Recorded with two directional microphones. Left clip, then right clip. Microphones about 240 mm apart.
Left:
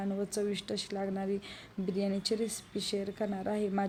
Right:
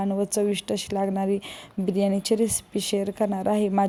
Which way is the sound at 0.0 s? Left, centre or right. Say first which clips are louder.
Right 10 dB; right.